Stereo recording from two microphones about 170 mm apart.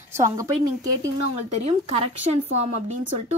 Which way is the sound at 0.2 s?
20° right (ahead or behind).